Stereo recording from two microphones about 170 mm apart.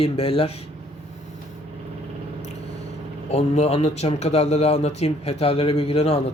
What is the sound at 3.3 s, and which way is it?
Speech, 40° left (ahead or behind).